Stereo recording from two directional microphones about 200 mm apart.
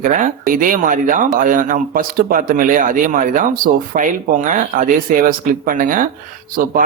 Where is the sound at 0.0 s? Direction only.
40° right (ahead or behind).